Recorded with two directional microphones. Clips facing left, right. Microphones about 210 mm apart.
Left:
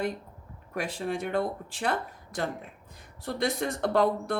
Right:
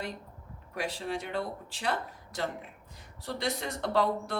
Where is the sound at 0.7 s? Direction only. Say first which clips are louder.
Left 3 dB; 50° left (ahead or behind).